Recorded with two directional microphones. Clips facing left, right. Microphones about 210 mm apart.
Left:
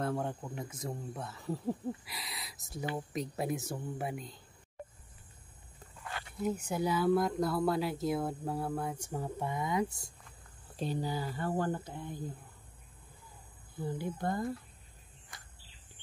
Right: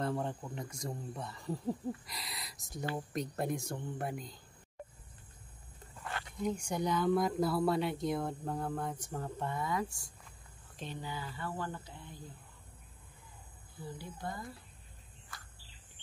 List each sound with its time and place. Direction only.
0.0 s speech: centre (ahead or behind)
6.4 s speech: 5° left (ahead or behind); by 10.1 s 20° left (ahead or behind)
10.8 s speech: 40° left (ahead or behind)
13.7 s speech: 50° left (ahead or behind)